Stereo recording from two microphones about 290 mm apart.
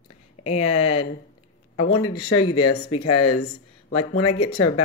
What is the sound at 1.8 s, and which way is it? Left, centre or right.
Speech, left.